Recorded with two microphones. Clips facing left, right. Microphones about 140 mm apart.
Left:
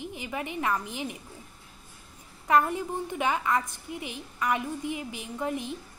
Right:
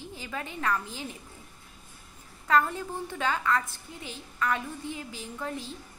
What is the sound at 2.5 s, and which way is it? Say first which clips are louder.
A woman's voice: left 2 dB; 20° left (ahead or behind).